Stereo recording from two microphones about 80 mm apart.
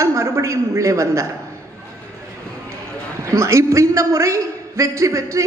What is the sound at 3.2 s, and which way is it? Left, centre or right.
A man's voice, right.